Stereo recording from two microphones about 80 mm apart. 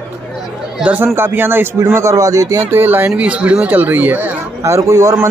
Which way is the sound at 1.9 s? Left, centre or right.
Right.